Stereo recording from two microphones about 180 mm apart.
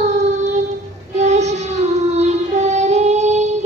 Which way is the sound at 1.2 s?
40° right (ahead or behind).